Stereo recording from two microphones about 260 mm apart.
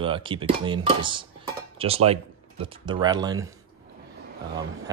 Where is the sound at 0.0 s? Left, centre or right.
Centre.